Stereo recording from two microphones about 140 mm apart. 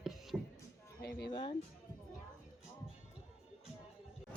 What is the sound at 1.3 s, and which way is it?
Music, 35° left (ahead or behind).